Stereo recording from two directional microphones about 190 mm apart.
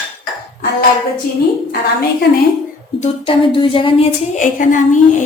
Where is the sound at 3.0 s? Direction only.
25° left (ahead or behind).